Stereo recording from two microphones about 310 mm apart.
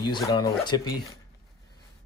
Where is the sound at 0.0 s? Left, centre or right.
Centre.